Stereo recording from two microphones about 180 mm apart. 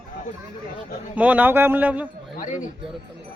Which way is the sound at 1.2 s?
10° right (ahead or behind).